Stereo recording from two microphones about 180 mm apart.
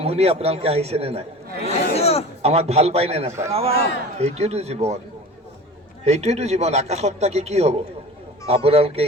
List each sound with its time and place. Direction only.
0.0 s a man's voice: 35° right (ahead or behind)
1.6 s chatter: 35° left (ahead or behind)
2.4 s a man's voice: 35° right (ahead or behind)
6.1 s a man's voice: 35° right (ahead or behind)